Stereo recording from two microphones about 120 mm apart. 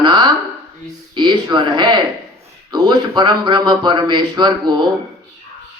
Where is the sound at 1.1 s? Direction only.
40° right (ahead or behind).